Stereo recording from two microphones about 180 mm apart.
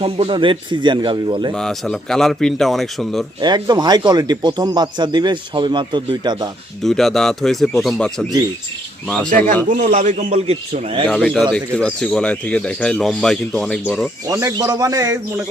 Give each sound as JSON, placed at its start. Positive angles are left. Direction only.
{"t": 0.0, "sound": "speech", "side_deg": -30}
{"t": 1.5, "sound": "speech", "side_deg": 5}
{"t": 3.4, "sound": "speech", "side_deg": -25}
{"t": 6.8, "sound": "speech", "side_deg": 0}
{"t": 9.6, "sound": "a man's voice", "side_deg": -40}
{"t": 11.1, "sound": "speech", "side_deg": 0}
{"t": 14.3, "sound": "speech", "side_deg": -20}